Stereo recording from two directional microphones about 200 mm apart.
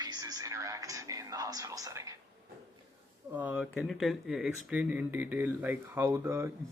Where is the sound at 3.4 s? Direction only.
10° right (ahead or behind).